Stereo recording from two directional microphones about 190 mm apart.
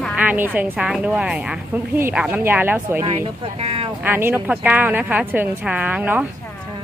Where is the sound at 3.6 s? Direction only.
30° right (ahead or behind).